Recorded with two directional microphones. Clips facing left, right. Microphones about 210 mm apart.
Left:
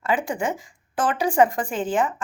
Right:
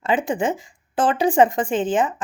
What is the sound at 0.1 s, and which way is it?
Speech, 20° right (ahead or behind).